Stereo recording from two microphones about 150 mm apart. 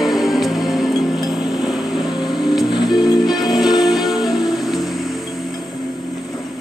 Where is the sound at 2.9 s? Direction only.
25° left (ahead or behind).